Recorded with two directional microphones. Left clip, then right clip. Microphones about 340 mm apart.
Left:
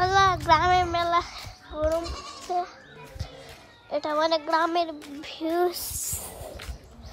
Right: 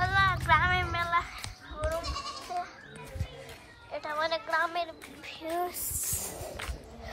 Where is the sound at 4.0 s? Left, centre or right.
Left.